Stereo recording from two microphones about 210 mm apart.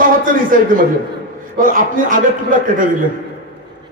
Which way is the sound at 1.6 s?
40° right (ahead or behind).